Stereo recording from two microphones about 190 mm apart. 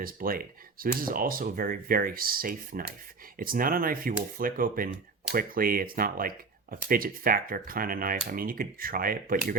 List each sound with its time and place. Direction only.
0.0 s speech: 50° right (ahead or behind)